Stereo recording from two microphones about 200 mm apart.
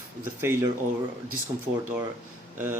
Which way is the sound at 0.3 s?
10° right (ahead or behind).